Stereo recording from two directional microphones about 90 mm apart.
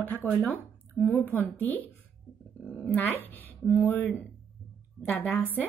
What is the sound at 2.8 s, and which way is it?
Speech, 20° left (ahead or behind).